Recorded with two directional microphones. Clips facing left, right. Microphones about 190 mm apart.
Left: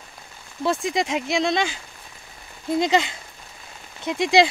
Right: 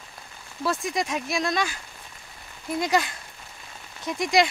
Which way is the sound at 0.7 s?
25° left (ahead or behind).